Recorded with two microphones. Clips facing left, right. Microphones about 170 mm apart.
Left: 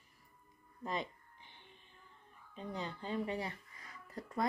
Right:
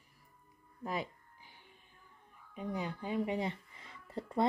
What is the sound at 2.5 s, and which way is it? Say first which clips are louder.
Speech: right 4 dB; 10° right (ahead or behind).